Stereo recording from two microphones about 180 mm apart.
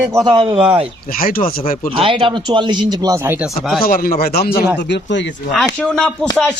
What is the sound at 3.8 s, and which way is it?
Speech, 55° left (ahead or behind).